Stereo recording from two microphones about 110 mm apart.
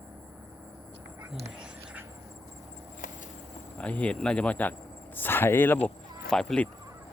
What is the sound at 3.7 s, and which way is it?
Speech, 10° left (ahead or behind).